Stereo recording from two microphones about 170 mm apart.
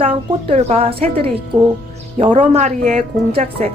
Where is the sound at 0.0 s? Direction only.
35° right (ahead or behind).